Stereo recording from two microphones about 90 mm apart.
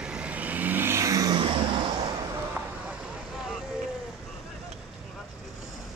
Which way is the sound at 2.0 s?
40° right (ahead or behind).